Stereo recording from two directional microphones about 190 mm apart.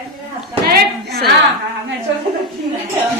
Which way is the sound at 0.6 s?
55° right (ahead or behind).